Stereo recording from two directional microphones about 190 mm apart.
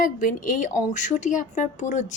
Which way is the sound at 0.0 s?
45° left (ahead or behind).